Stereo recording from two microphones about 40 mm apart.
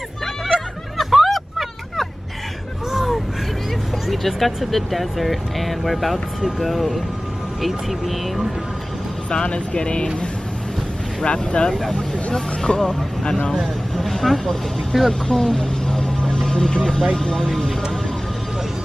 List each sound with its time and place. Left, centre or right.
0.9 s vehicle: centre
2.9 s a sound: centre
4.1 s speech: centre
9.3 s speech: left
11.2 s speech: left
13.9 s speech: centre
15.2 s a sound: centre
16.5 s speech: centre